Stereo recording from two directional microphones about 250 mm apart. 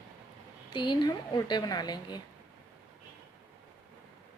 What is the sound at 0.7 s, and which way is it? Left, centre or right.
A woman's voice, centre.